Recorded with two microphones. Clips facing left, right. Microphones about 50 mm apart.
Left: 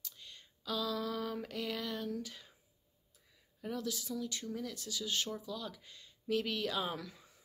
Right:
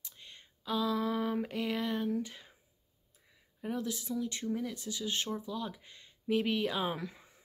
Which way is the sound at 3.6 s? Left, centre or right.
Right.